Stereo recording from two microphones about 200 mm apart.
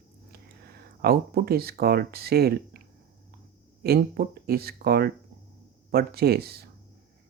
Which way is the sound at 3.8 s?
50° right (ahead or behind).